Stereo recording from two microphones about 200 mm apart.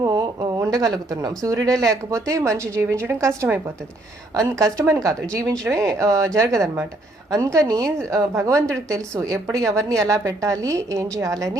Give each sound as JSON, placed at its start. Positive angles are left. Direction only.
{"t": 0.0, "sound": "speech", "side_deg": -20}